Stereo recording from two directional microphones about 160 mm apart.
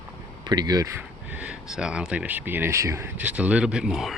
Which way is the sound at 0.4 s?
25° right (ahead or behind).